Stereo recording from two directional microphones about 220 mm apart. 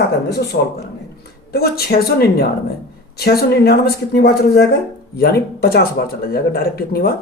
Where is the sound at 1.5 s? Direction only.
45° left (ahead or behind).